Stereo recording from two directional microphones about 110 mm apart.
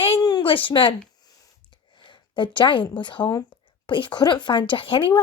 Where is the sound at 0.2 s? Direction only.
40° left (ahead or behind).